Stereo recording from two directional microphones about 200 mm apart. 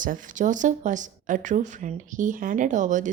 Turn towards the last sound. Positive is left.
turn(degrees=-40)  # may be behind; listen again after turning